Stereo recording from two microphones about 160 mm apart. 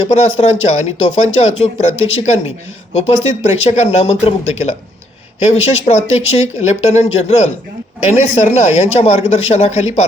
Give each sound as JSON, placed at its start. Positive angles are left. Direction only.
{"t": 0.1, "sound": "speech", "side_deg": 45}